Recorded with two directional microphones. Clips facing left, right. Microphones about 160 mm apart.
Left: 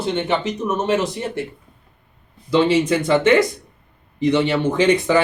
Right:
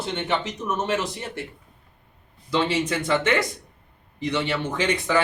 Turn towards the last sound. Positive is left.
turn(degrees=20)  # may be behind; listen again after turning